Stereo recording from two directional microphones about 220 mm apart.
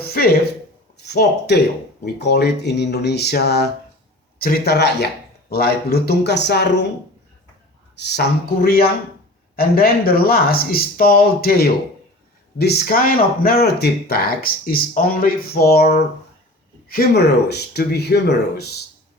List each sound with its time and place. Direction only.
0.0 s speech: 45° left (ahead or behind)
7.9 s speech: 50° left (ahead or behind)